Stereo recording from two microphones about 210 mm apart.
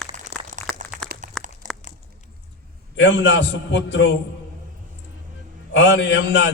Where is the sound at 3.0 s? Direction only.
60° left (ahead or behind).